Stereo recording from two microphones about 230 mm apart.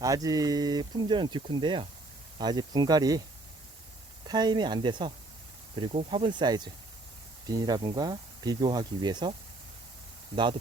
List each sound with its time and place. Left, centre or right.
0.0 s speech: centre
4.3 s speech: centre